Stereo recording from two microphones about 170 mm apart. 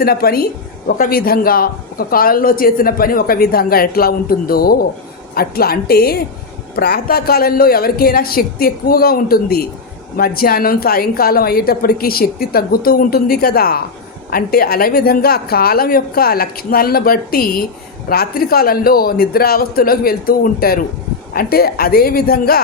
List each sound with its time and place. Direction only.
0.0 s a man's voice: 65° left (ahead or behind)